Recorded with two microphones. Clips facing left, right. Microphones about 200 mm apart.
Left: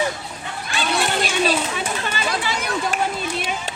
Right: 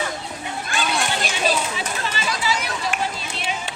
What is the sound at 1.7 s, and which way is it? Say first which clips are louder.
Chatter: left 2 dB; 55° left (ahead or behind).